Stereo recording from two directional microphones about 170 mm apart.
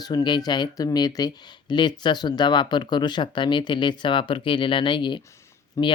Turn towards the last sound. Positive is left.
turn(degrees=20)  # may be behind; listen again after turning